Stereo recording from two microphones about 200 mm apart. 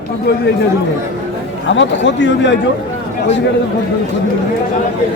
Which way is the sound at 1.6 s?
65° left (ahead or behind).